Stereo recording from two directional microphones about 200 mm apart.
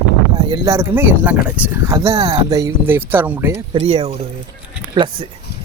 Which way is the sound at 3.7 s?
30° right (ahead or behind).